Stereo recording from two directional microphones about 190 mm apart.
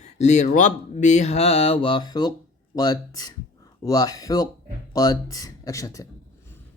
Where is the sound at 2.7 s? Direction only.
20° left (ahead or behind).